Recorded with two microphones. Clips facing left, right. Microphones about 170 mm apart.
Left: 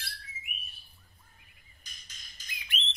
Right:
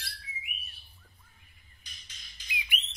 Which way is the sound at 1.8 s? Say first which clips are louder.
Even; 45° left (ahead or behind).